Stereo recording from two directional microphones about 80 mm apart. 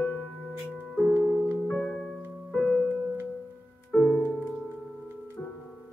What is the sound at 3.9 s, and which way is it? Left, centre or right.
Music, centre.